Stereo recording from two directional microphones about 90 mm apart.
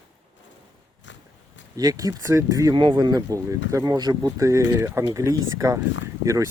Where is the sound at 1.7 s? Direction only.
40° right (ahead or behind).